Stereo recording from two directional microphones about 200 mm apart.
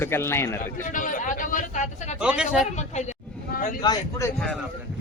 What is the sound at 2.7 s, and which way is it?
Vehicle, 35° left (ahead or behind).